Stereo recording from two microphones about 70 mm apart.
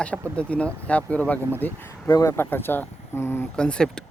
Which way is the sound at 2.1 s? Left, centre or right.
Left.